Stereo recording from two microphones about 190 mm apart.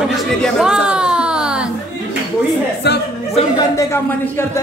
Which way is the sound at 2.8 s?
60° left (ahead or behind).